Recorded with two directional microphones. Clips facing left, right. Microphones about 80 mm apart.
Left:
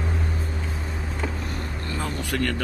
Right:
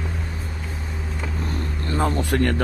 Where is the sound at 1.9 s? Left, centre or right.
Right.